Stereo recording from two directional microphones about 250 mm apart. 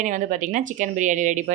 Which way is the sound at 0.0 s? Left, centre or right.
Right.